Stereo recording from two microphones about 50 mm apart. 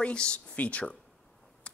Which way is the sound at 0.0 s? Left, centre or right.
Left.